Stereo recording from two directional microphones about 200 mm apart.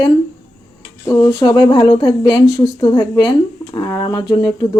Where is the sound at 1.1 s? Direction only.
20° left (ahead or behind).